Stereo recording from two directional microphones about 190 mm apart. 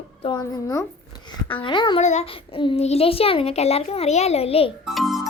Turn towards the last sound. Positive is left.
turn(degrees=0)  # may be behind; listen again after turning